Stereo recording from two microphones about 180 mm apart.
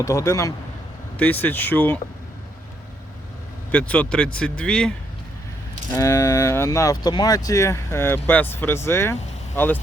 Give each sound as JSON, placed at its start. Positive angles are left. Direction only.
{"t": 0.0, "sound": "speech", "side_deg": 15}
{"t": 3.7, "sound": "speech", "side_deg": 5}
{"t": 5.9, "sound": "speech", "side_deg": 15}